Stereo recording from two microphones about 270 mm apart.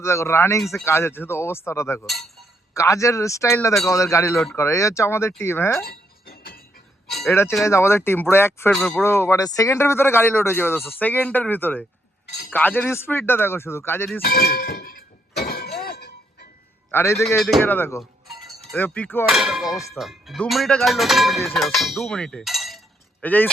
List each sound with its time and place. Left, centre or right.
0.0 s speech: centre
5.8 s chink: left
7.1 s speech: centre
14.2 s clang: left
15.8 s glass: left
16.9 s speech: centre
19.6 s speech: centre
20.0 s speech: centre